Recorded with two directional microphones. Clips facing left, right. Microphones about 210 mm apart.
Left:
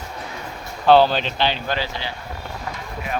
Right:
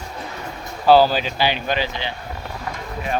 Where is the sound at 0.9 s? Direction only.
5° right (ahead or behind).